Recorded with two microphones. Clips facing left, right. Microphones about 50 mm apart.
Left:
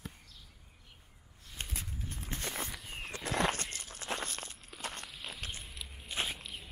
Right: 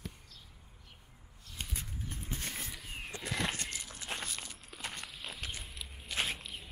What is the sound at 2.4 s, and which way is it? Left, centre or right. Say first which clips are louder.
Walk: left 6 dB; left.